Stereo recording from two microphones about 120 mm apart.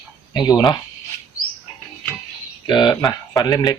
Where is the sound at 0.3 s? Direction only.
35° left (ahead or behind).